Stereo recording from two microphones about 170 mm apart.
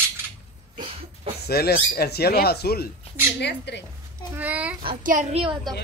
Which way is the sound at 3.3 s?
90° left.